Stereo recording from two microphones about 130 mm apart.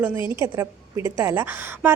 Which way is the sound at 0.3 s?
20° right (ahead or behind).